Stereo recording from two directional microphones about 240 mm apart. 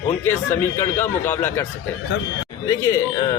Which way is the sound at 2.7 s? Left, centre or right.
Centre.